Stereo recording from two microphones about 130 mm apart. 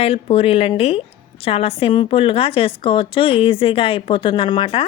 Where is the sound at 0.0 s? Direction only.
50° left (ahead or behind).